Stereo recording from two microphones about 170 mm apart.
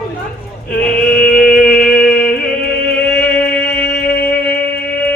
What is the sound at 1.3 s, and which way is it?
Music, 60° left (ahead or behind).